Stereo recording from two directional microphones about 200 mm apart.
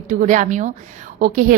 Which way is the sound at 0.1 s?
40° right (ahead or behind).